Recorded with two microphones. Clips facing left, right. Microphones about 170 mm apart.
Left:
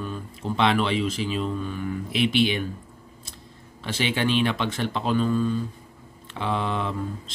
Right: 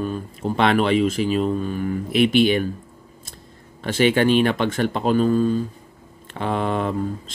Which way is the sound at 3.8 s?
50° right (ahead or behind).